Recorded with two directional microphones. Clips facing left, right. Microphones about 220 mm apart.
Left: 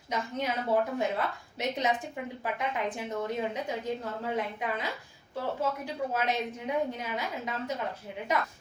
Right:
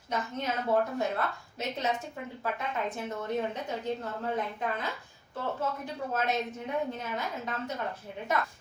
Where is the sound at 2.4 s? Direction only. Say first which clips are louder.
Even; 15° left (ahead or behind).